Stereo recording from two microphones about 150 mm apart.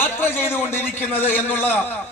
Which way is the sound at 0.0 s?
15° left (ahead or behind).